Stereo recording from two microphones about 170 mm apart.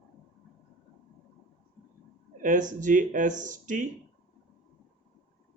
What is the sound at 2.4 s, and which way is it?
Speech, 50° right (ahead or behind).